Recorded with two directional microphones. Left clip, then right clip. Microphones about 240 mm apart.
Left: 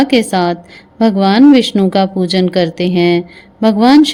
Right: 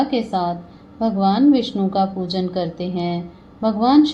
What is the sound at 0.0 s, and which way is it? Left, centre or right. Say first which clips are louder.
A woman's voice: left 8 dB; left.